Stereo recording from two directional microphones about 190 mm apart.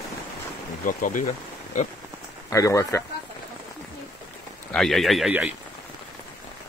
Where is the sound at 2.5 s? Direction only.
15° left (ahead or behind).